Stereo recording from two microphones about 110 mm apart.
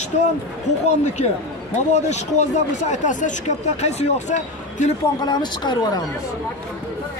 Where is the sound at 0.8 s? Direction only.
90° left.